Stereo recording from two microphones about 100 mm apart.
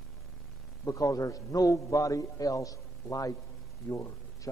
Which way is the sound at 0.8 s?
35° left (ahead or behind).